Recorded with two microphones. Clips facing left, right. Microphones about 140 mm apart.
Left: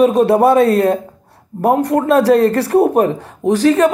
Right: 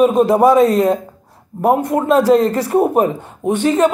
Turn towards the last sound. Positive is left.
turn(degrees=80)